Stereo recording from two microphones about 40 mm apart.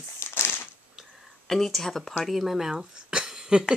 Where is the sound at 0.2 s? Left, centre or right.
Left.